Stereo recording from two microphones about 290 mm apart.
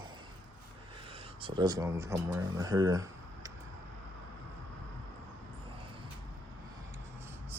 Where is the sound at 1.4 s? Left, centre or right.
Centre.